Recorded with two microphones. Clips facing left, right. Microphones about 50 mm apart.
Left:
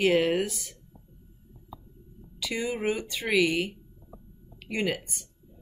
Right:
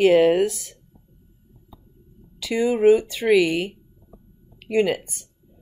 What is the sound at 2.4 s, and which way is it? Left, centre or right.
Speech, centre.